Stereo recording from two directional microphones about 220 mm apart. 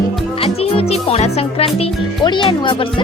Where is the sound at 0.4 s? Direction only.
25° left (ahead or behind).